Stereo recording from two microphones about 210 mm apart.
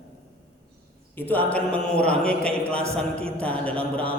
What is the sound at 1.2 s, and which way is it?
A man's voice, 10° left (ahead or behind).